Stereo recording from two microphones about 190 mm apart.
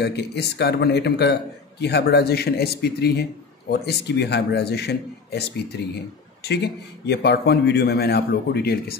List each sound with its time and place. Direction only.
0.0 s a man's voice: 60° left (ahead or behind)